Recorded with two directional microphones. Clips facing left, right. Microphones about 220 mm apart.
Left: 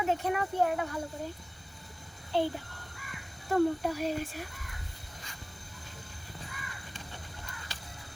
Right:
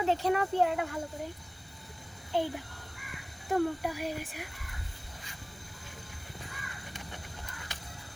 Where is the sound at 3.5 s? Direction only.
15° right (ahead or behind).